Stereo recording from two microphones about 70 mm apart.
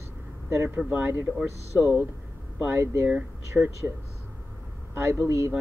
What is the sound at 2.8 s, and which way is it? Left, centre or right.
Speech, right.